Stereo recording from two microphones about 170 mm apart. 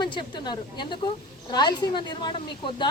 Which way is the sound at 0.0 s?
30° left (ahead or behind).